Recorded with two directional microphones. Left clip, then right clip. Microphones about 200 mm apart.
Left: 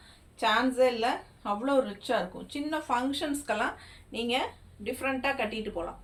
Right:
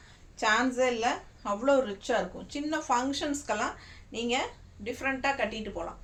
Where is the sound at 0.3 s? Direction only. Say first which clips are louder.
Left 1 dB; 10° right (ahead or behind).